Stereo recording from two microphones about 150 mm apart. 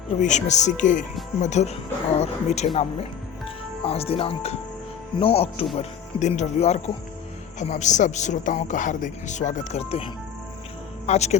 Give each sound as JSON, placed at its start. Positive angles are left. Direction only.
{"t": 0.2, "sound": "speech", "side_deg": 55}
{"t": 3.8, "sound": "speech", "side_deg": 40}